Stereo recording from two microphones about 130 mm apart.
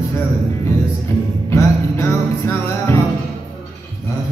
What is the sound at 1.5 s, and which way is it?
Music, 20° left (ahead or behind).